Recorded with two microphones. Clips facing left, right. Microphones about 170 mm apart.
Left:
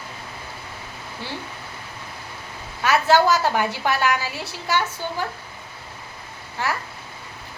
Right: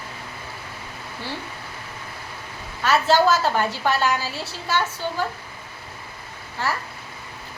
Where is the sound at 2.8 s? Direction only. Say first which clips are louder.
Left 1 dB; 15° left (ahead or behind).